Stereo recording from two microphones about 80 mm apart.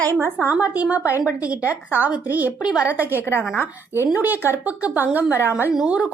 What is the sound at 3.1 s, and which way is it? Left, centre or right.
Speech, left.